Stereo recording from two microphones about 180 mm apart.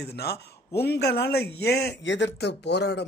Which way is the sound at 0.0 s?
60° left (ahead or behind).